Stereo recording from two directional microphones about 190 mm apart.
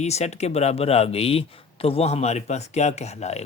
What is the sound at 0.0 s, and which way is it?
Speech, 35° left (ahead or behind).